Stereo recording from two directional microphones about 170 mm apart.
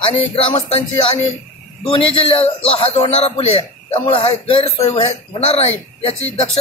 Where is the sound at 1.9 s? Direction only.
30° left (ahead or behind).